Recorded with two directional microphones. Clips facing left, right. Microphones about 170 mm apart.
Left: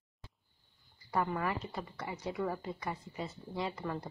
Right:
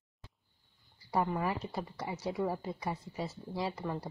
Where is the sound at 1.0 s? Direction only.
15° right (ahead or behind).